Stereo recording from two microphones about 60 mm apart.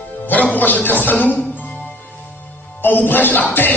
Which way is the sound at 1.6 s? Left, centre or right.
Left.